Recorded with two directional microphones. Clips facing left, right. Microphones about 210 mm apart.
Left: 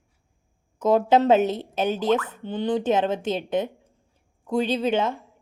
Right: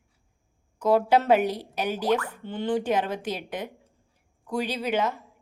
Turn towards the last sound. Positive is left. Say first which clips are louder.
# left 4 dB
turn(degrees=25)  # may be behind; listen again after turning